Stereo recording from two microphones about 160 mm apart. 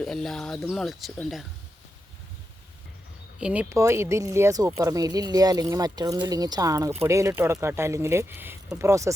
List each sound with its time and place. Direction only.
0.0 s speech: centre (ahead or behind)
3.3 s speech: 10° right (ahead or behind)